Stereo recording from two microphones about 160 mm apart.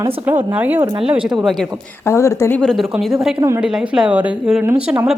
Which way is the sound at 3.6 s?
5° right (ahead or behind).